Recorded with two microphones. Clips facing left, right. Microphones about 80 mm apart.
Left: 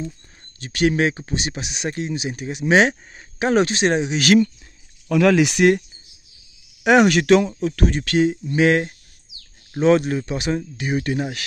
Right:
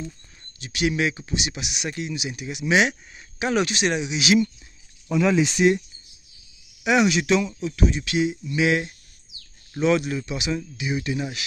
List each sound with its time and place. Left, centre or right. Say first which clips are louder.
0.6 s speech: left 5 dB; left
5.0 s speech: left 5 dB; left